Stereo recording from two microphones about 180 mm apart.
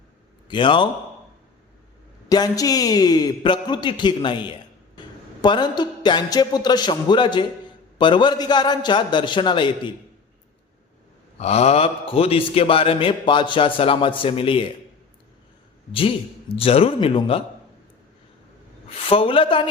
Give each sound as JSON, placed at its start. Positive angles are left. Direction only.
{"t": 0.4, "sound": "a man's voice", "side_deg": 25}
{"t": 2.3, "sound": "a man's voice", "side_deg": 20}
{"t": 11.3, "sound": "a man's voice", "side_deg": 35}
{"t": 15.9, "sound": "a man's voice", "side_deg": 30}
{"t": 18.9, "sound": "a woman's voice", "side_deg": 30}